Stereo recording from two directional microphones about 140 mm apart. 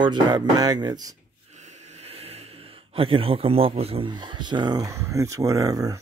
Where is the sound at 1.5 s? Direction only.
55° right (ahead or behind).